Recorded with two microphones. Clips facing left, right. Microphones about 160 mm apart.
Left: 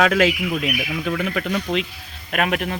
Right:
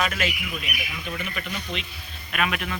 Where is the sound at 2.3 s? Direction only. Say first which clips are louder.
Left 5 dB; 55° left (ahead or behind).